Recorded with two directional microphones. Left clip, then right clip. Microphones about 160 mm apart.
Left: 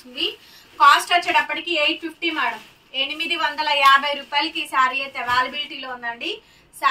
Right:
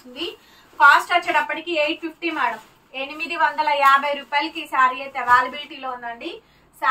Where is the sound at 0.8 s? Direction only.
5° right (ahead or behind).